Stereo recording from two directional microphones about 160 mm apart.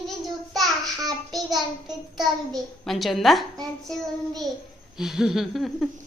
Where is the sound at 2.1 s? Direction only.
Centre (ahead or behind).